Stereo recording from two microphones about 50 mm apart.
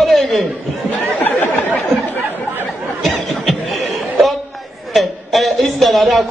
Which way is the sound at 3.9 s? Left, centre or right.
Centre.